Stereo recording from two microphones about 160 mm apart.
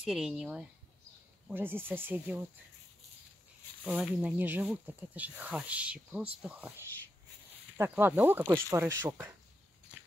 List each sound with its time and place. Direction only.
0.0 s speech: 5° right (ahead or behind)
3.8 s speech: 5° right (ahead or behind)
7.9 s speech: 15° right (ahead or behind)